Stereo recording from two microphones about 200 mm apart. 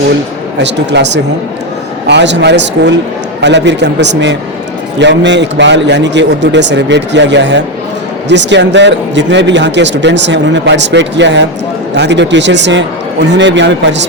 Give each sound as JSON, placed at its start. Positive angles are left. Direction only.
{"t": 0.6, "sound": "speech", "side_deg": -60}